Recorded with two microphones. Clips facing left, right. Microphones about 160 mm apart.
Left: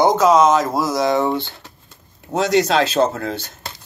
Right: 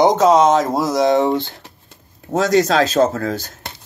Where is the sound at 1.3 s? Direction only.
40° right (ahead or behind).